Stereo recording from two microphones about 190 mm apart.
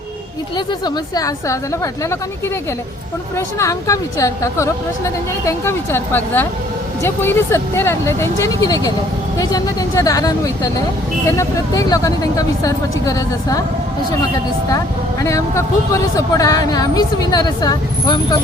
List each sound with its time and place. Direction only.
0.5 s speech: 20° left (ahead or behind)
3.3 s a woman's voice: 15° left (ahead or behind)
15.2 s speech: 15° left (ahead or behind)